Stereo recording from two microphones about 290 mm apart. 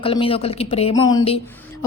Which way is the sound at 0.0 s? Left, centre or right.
Centre.